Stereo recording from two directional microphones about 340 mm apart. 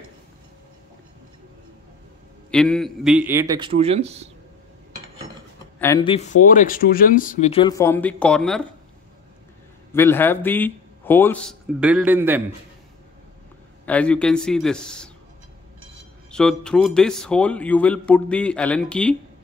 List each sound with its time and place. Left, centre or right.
2.5 s a man's voice: centre
5.8 s speech: centre
9.9 s a man's voice: centre
13.8 s a man's voice: centre
16.3 s a man's voice: centre